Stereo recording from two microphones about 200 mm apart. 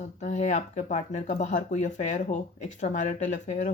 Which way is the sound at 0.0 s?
35° left (ahead or behind).